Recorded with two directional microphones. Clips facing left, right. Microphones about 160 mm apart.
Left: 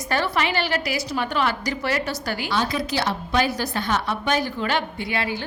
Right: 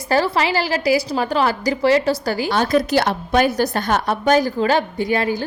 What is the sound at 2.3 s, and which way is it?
A woman's voice, 45° right (ahead or behind).